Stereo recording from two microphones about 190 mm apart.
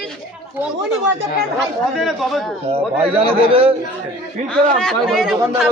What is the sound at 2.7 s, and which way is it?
A man's voice, 30° right (ahead or behind).